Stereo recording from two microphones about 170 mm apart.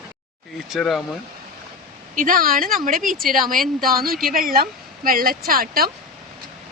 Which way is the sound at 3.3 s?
55° right (ahead or behind).